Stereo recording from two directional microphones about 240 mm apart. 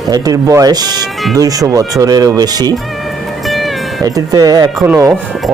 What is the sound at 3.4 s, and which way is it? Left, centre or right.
Music, centre.